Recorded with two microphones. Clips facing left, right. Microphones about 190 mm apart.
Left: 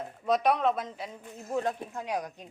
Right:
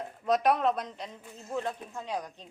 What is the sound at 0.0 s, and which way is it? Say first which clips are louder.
Speech: even; centre (ahead or behind).